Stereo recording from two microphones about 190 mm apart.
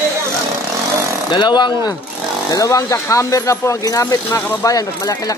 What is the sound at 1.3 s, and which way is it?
Speech, 25° left (ahead or behind).